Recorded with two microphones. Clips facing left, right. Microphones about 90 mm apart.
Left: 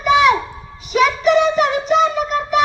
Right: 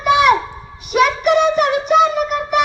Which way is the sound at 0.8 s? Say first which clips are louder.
Even; 55° right (ahead or behind).